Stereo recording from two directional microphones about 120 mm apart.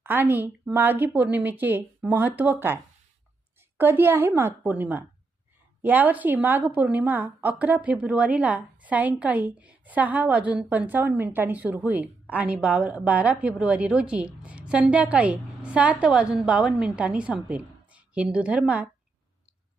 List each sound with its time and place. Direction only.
0.0 s a woman's voice: 15° right (ahead or behind)